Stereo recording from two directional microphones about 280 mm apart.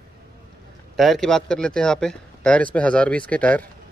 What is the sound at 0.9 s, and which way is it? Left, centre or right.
Speech, centre.